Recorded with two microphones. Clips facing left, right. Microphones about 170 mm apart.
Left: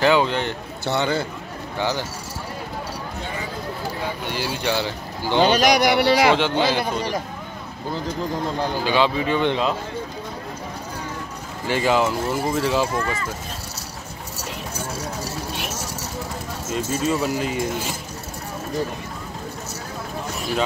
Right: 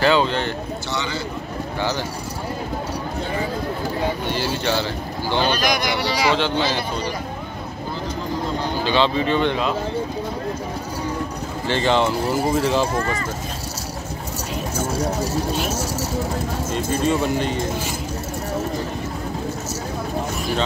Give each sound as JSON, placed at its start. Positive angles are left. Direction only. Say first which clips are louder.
{"t": 0.0, "sound": "speech", "louder": "even", "side_deg": 15}
{"t": 0.8, "sound": "a man's voice", "louder": "left 8 dB", "side_deg": 55}
{"t": 1.8, "sound": "speech", "louder": "left 1 dB", "side_deg": 15}
{"t": 4.3, "sound": "speech", "louder": "right 2 dB", "side_deg": 10}
{"t": 5.6, "sound": "speech", "louder": "left 5 dB", "side_deg": 70}
{"t": 6.3, "sound": "speech", "louder": "left 1 dB", "side_deg": 15}
{"t": 8.8, "sound": "speech", "louder": "right 2 dB", "side_deg": 10}
{"t": 11.6, "sound": "speech", "louder": "even", "side_deg": 10}
{"t": 12.9, "sound": "speech", "louder": "right 2 dB", "side_deg": -40}
{"t": 16.7, "sound": "speech", "louder": "right 1 dB", "side_deg": 5}